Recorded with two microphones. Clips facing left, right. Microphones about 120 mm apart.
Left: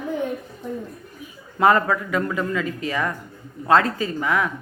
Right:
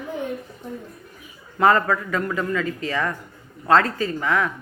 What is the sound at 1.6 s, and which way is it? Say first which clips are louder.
A woman's voice: even; 15° left (ahead or behind).